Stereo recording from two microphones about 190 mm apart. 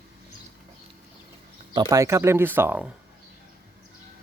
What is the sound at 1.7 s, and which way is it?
Speech, 15° right (ahead or behind).